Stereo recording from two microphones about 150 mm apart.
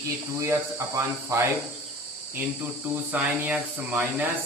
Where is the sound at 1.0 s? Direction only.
20° right (ahead or behind).